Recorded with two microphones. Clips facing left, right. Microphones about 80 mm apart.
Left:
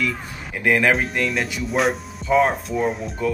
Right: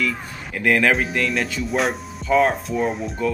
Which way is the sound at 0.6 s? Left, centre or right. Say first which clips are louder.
Even; centre.